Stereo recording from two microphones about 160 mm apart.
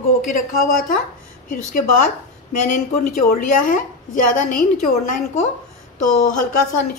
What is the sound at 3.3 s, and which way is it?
A woman's voice, 55° left (ahead or behind).